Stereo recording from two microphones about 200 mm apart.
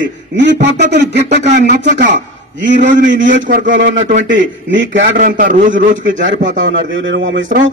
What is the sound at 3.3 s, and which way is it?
Speech, 45° right (ahead or behind).